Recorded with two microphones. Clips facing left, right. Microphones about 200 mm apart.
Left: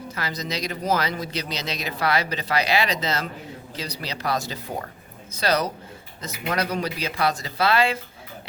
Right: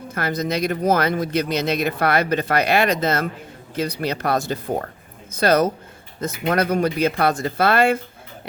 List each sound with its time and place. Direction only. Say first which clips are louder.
0.1 s speech: right 8 dB; 55° right (ahead or behind)